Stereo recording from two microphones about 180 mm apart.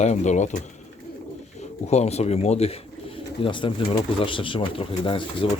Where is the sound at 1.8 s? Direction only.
35° left (ahead or behind).